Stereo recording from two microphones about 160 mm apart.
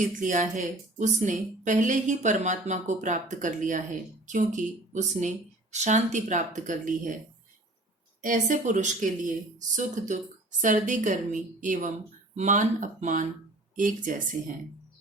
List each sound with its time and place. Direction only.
0.0 s a woman's voice: 55° right (ahead or behind)
8.2 s a woman's voice: 55° right (ahead or behind)